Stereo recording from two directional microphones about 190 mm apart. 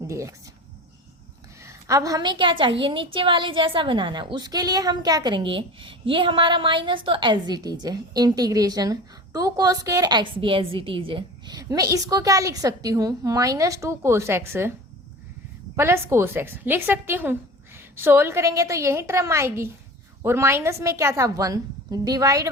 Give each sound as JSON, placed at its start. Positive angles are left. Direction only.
{"t": 0.0, "sound": "speech", "side_deg": -15}
{"t": 1.6, "sound": "a woman's voice", "side_deg": -15}
{"t": 15.7, "sound": "a woman's voice", "side_deg": -15}